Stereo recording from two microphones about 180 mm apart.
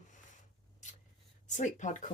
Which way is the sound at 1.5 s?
45° left (ahead or behind).